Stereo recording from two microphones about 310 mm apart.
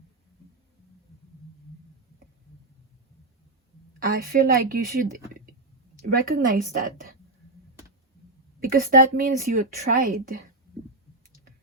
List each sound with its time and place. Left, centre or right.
4.0 s a woman's voice: right
8.7 s a woman's voice: right